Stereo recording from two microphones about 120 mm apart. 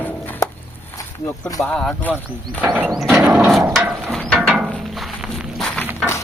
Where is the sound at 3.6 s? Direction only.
15° right (ahead or behind).